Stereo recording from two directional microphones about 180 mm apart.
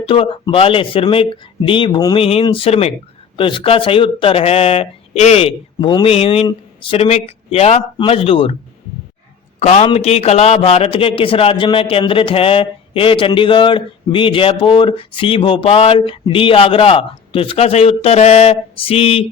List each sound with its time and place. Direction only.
0.0 s a man's voice: 30° left (ahead or behind)
9.6 s a man's voice: 40° left (ahead or behind)